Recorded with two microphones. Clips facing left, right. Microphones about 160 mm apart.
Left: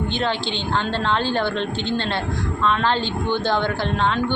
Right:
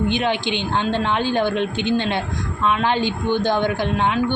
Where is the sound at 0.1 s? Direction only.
15° right (ahead or behind).